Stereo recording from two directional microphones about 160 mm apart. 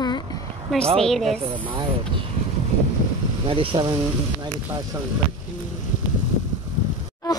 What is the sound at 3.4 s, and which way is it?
Speech, 35° right (ahead or behind).